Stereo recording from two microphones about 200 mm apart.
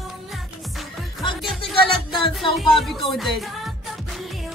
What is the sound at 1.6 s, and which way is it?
Music, 25° left (ahead or behind).